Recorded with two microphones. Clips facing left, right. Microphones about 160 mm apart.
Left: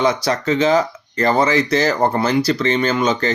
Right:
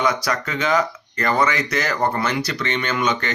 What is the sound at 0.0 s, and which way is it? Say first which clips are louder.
Speech: left 4 dB; 25° left (ahead or behind).